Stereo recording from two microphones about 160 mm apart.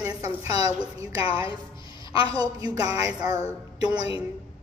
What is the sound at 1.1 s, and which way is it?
A woman's voice, 35° left (ahead or behind).